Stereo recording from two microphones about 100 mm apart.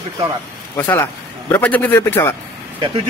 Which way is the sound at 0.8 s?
20° left (ahead or behind).